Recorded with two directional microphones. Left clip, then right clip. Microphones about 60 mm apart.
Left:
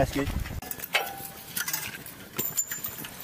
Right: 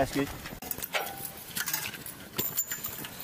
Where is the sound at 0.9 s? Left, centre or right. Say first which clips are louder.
Left 5 dB; left.